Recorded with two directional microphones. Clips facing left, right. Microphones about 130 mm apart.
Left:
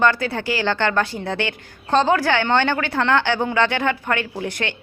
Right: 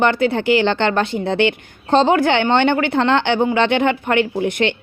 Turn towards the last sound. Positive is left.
turn(degrees=-20)  # may be behind; listen again after turning